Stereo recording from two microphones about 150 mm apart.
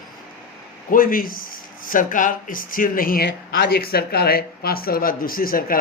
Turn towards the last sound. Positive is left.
turn(degrees=75)  # may be behind; listen again after turning